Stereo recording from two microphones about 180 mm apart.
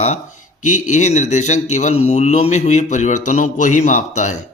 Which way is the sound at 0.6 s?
40° left (ahead or behind).